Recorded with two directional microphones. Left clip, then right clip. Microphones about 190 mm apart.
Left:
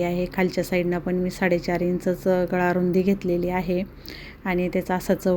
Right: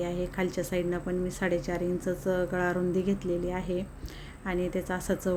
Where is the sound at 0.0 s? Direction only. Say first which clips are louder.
Left 7 dB; 25° left (ahead or behind).